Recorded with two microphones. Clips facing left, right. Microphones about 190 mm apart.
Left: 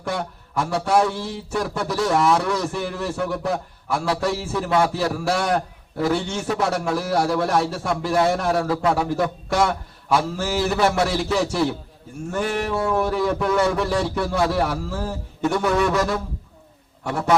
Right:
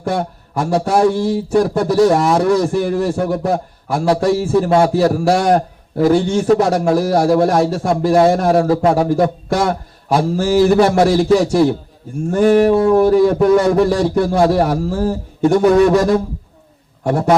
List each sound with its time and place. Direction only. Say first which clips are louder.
0.0 s a man's voice: right 7 dB; 45° right (ahead or behind)